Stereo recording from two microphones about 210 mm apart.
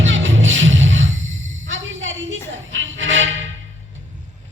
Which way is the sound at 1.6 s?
65° right (ahead or behind).